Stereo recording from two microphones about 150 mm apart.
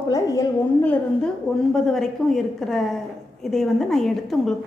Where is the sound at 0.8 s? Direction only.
5° left (ahead or behind).